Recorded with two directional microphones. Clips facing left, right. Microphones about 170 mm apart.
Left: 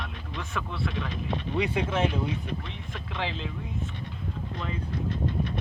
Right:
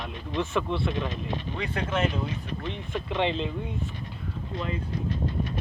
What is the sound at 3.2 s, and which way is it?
Speech, centre (ahead or behind).